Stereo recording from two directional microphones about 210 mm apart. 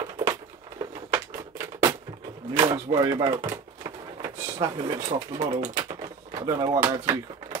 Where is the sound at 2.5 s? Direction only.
15° right (ahead or behind).